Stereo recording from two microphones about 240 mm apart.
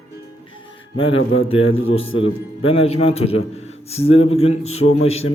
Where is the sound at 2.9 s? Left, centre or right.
Left.